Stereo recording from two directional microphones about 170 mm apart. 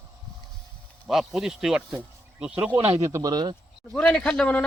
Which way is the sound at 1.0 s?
Centre (ahead or behind).